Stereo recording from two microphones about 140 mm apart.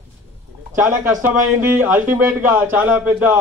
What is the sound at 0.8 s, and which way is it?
A man's voice, 15° right (ahead or behind).